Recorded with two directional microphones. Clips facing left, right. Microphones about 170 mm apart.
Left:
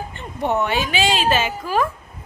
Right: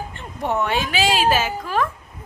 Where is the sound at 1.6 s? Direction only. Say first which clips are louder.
Left 2 dB; 10° left (ahead or behind).